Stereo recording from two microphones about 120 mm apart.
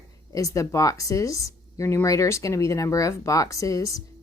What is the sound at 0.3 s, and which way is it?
Speech, 25° left (ahead or behind).